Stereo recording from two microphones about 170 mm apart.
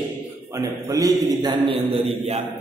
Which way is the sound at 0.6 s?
20° right (ahead or behind).